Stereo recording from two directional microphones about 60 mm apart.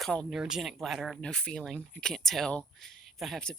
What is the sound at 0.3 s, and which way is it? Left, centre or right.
Speech, centre.